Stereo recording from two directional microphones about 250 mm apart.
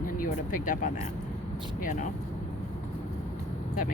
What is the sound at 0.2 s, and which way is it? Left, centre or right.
Speech, left.